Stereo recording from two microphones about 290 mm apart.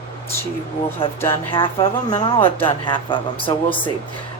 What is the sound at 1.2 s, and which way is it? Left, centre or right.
Speech, centre.